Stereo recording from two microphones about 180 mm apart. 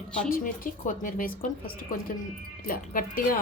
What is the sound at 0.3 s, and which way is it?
Speech, 50° left (ahead or behind).